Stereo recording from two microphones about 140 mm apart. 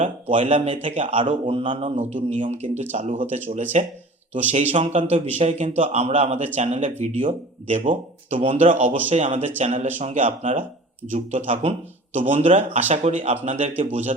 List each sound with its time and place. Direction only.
0.0 s speech: 60° right (ahead or behind)
0.5 s a man's voice: 45° right (ahead or behind)
2.0 s a man's voice: 55° right (ahead or behind)
12.2 s a man's voice: 45° right (ahead or behind)